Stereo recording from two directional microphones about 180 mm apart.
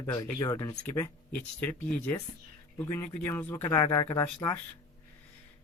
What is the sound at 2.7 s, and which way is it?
A man's voice, 15° left (ahead or behind).